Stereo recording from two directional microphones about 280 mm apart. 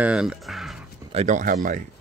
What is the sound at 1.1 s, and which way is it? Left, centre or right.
Speech, right.